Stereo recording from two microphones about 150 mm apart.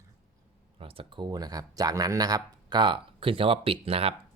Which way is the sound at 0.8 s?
35° right (ahead or behind).